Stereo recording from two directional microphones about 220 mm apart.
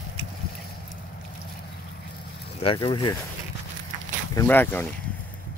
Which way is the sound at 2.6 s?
25° left (ahead or behind).